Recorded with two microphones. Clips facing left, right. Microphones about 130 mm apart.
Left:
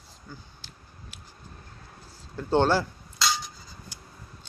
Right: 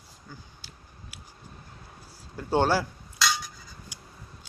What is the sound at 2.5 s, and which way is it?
Speech, 10° right (ahead or behind).